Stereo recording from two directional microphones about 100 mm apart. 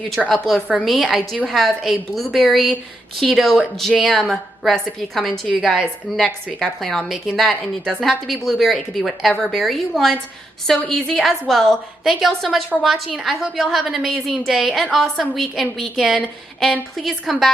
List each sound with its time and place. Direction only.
0.2 s a woman's voice: 5° right (ahead or behind)